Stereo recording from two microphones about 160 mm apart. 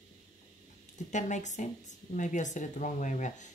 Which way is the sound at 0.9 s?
50° left (ahead or behind).